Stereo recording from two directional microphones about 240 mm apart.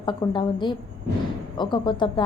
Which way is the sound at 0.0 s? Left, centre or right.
Centre.